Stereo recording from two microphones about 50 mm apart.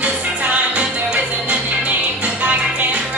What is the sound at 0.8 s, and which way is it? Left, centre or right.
Music, right.